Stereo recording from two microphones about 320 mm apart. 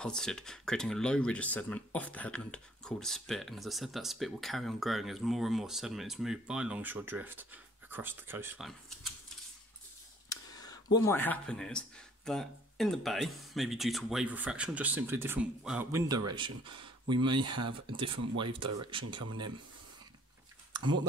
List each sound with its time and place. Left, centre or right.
0.0 s speech: centre
10.3 s a sound: centre
11.1 s speech: centre